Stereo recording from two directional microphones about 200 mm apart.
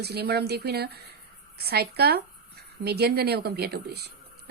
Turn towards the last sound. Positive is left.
turn(degrees=-55)  # may be behind; listen again after turning